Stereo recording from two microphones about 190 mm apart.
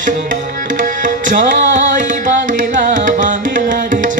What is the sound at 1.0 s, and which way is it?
Carnatic music, 45° right (ahead or behind).